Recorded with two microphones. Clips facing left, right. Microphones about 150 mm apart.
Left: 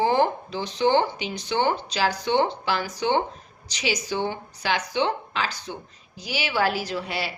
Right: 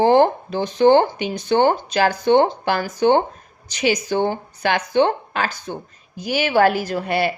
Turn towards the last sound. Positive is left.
turn(degrees=-55)  # may be behind; listen again after turning